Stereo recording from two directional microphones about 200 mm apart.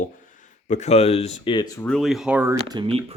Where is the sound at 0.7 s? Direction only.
35° left (ahead or behind); by 1.9 s 15° left (ahead or behind).